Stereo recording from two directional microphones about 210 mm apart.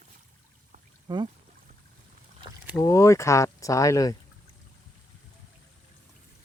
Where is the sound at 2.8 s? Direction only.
15° left (ahead or behind).